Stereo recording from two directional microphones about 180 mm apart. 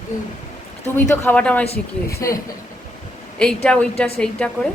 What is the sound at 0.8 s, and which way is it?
Speech, 10° left (ahead or behind).